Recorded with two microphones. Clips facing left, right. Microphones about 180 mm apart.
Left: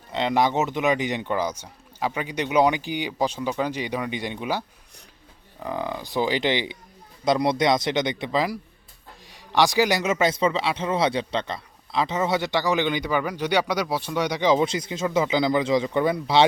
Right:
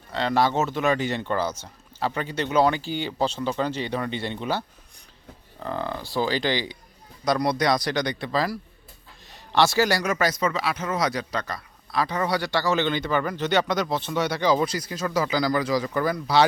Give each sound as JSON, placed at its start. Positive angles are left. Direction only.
{"t": 0.1, "sound": "speech", "side_deg": 20}